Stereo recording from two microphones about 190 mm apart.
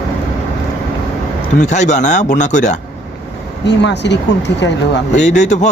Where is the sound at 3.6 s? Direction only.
65° left (ahead or behind).